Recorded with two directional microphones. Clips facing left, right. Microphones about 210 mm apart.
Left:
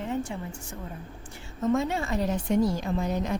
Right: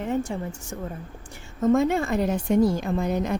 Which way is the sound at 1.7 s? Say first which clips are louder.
Right 6 dB; 50° right (ahead or behind).